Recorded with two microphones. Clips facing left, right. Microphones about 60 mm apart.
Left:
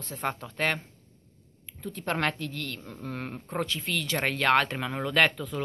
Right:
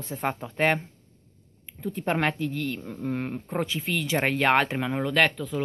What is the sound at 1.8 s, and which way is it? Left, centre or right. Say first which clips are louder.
Speech: right 3 dB; centre.